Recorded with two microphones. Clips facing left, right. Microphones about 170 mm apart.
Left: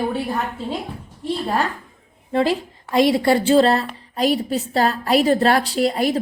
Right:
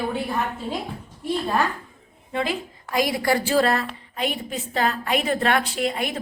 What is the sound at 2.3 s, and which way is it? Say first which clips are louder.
A woman's voice: left 7 dB; 35° left (ahead or behind).